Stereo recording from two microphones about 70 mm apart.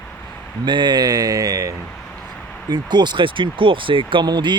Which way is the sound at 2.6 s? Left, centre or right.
Right.